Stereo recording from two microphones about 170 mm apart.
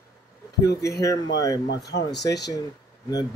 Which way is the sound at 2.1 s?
80° left.